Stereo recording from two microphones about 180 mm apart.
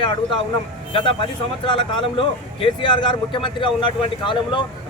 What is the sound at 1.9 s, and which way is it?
Speech, 30° left (ahead or behind).